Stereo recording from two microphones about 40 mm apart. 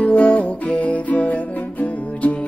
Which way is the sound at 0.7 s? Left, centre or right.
Left.